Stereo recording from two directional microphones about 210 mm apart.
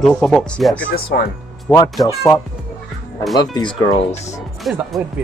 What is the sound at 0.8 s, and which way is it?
Speech, 45° left (ahead or behind).